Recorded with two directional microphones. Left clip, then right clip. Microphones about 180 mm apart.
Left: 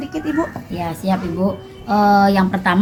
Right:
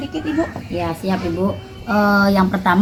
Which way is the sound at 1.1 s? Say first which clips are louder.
Left 5 dB; 70° left (ahead or behind).